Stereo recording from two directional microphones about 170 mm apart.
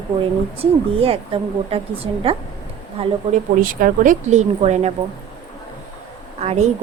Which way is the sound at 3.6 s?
55° right (ahead or behind).